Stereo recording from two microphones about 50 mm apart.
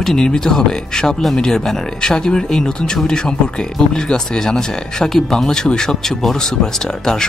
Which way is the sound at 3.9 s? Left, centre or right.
Centre.